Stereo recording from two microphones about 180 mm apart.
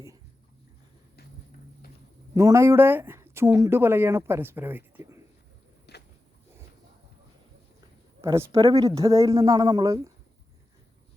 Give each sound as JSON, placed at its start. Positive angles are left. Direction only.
{"t": 2.3, "sound": "speech", "side_deg": -15}
{"t": 5.9, "sound": "a sound", "side_deg": 70}
{"t": 8.2, "sound": "speech", "side_deg": -15}